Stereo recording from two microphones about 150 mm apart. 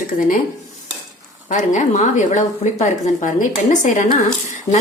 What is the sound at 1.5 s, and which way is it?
Speech, 55° left (ahead or behind).